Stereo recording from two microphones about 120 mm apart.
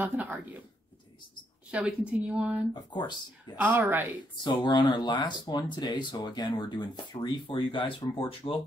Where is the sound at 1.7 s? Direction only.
10° right (ahead or behind).